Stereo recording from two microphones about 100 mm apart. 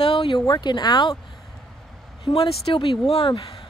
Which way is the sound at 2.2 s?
70° left (ahead or behind).